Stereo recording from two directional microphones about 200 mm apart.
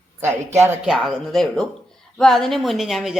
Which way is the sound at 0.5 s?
10° right (ahead or behind).